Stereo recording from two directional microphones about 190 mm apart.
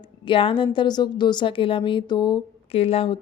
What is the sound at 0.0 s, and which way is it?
A woman's voice, 25° left (ahead or behind).